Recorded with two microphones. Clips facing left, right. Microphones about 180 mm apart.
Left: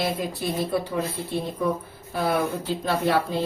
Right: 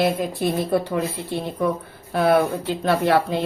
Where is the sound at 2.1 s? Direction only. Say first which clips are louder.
Right 6 dB; 65° right (ahead or behind).